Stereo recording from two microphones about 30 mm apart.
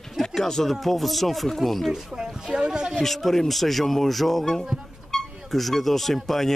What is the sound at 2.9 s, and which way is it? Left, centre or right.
Speech, centre.